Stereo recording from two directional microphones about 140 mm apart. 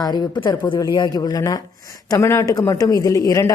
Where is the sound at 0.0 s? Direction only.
30° left (ahead or behind).